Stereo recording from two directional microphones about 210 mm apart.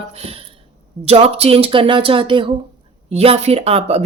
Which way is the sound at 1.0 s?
30° right (ahead or behind).